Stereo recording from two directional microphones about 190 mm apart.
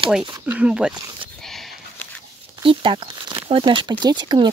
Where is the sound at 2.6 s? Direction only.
25° right (ahead or behind).